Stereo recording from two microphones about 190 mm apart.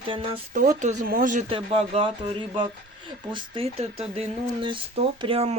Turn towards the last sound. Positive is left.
turn(degrees=-30)  # may be behind; listen again after turning